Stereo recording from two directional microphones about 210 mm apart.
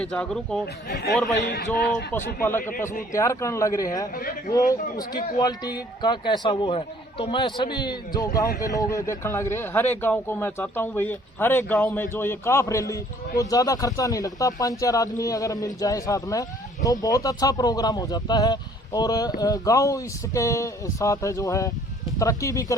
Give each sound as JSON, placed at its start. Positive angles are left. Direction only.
{"t": 0.0, "sound": "speech", "side_deg": 5}
{"t": 2.4, "sound": "a man's voice", "side_deg": 10}
{"t": 4.1, "sound": "a man's voice", "side_deg": 40}
{"t": 4.7, "sound": "a man's voice", "side_deg": 15}